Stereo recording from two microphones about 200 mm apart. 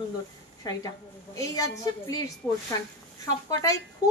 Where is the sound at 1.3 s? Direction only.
15° left (ahead or behind).